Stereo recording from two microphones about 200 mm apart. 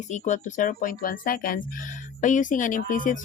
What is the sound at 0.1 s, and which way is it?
Speech, 35° left (ahead or behind).